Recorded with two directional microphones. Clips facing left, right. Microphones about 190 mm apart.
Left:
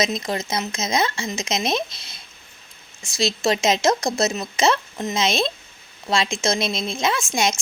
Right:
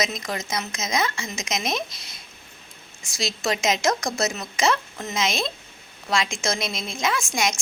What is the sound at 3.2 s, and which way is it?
A woman's voice, 25° left (ahead or behind).